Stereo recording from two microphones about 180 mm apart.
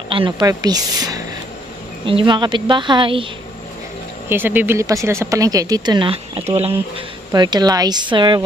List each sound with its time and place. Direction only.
0.1 s speech: 25° right (ahead or behind)
4.3 s speech: 10° right (ahead or behind); by 6.7 s 35° right (ahead or behind)
7.3 s speech: 25° right (ahead or behind)